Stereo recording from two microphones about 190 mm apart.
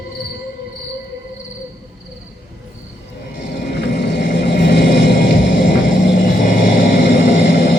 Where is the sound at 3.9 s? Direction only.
60° left (ahead or behind).